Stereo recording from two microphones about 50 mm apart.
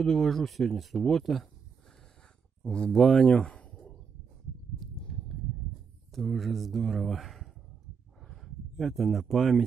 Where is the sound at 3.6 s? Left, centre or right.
Left.